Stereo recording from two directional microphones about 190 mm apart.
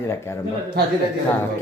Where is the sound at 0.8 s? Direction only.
55° right (ahead or behind).